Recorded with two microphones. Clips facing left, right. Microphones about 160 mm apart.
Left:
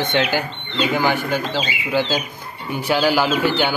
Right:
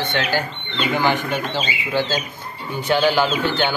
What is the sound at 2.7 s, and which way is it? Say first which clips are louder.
Speech: even; 5° left (ahead or behind).